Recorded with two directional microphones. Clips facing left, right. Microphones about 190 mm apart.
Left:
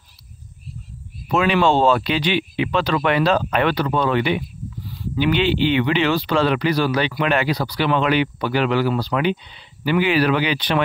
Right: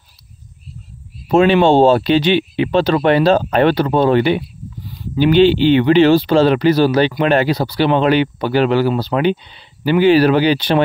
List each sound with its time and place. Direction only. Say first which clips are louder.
1.3 s speech: right 6 dB; 30° right (ahead or behind)